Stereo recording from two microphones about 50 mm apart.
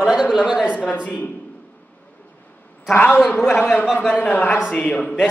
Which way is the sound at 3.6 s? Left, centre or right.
Left.